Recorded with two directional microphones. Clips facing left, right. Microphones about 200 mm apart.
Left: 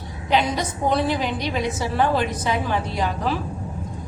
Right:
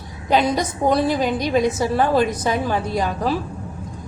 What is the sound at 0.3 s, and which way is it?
A woman's voice, 45° right (ahead or behind).